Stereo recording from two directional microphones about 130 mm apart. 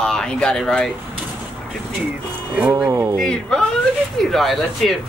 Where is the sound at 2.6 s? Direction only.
15° right (ahead or behind).